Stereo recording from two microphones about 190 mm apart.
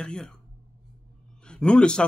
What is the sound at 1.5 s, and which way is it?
Speech, 5° left (ahead or behind).